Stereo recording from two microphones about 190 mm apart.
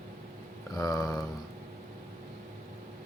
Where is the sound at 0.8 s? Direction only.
20° left (ahead or behind).